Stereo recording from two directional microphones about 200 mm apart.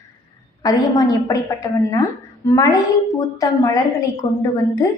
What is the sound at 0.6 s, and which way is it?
A woman's voice, 20° left (ahead or behind).